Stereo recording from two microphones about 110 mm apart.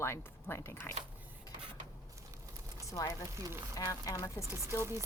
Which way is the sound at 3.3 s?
30° right (ahead or behind).